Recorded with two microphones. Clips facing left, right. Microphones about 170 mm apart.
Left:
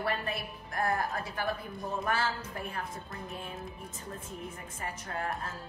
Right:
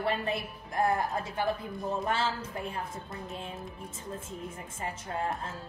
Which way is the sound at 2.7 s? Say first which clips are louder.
Right 2 dB; 20° right (ahead or behind).